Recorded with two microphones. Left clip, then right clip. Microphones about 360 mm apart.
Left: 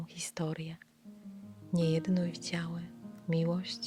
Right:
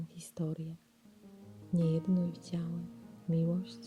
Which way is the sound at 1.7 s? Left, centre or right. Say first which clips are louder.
Left 2 dB; centre.